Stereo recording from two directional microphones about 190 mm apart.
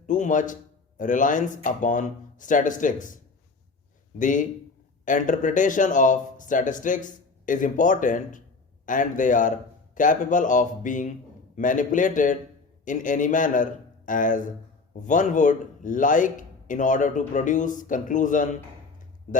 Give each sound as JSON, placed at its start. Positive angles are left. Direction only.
{"t": 0.1, "sound": "speech", "side_deg": 40}
{"t": 4.2, "sound": "a man's voice", "side_deg": 40}